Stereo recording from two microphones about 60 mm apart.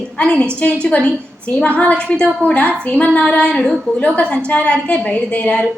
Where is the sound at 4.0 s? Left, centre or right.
Centre.